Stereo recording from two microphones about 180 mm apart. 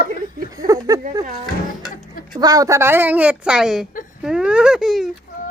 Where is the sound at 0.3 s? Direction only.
20° right (ahead or behind).